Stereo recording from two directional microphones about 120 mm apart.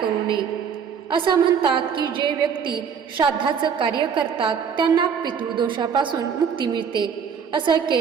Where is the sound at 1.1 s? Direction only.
45° right (ahead or behind).